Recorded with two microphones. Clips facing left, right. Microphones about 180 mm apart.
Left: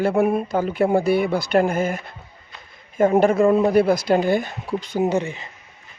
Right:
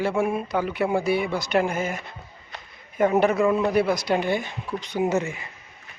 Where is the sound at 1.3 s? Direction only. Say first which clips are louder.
Left 4 dB; 55° left (ahead or behind).